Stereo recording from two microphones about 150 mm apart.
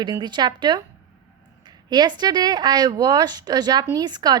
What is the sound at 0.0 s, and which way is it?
A woman's voice, 30° right (ahead or behind).